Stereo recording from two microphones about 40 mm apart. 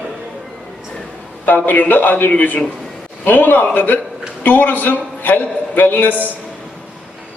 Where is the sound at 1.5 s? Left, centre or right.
Left.